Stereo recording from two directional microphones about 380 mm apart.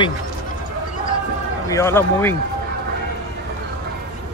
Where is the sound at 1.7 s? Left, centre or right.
Centre.